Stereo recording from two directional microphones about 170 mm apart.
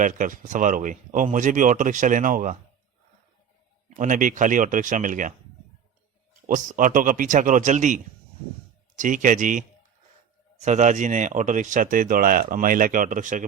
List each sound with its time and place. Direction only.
0.0 s speech: 50° right (ahead or behind)
3.8 s speech: 45° right (ahead or behind)
6.5 s speech: 50° right (ahead or behind)